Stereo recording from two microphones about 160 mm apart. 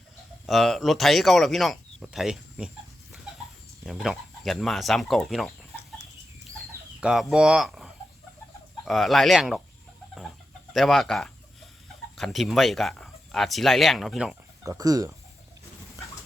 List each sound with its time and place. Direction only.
0.4 s speech: centre (ahead or behind)
3.8 s speech: centre (ahead or behind)
6.6 s chicken: centre (ahead or behind)
8.8 s speech: centre (ahead or behind)
10.2 s chicken: centre (ahead or behind)
12.1 s speech: centre (ahead or behind)
14.6 s speech: 20° right (ahead or behind)